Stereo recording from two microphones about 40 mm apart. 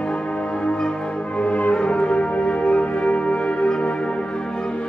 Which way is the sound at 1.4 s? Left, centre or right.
Left.